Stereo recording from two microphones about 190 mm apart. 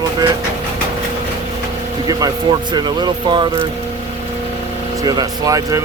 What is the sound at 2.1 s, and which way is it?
Speech, 20° right (ahead or behind).